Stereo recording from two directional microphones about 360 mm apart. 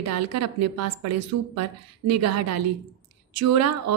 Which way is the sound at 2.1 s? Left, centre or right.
Right.